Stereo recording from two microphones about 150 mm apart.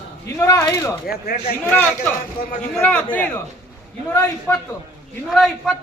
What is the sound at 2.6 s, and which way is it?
Speech, 5° left (ahead or behind).